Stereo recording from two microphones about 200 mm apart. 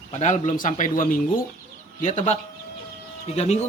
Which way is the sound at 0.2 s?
35° left (ahead or behind).